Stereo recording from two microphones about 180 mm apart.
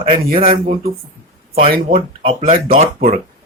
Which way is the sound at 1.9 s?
45° right (ahead or behind).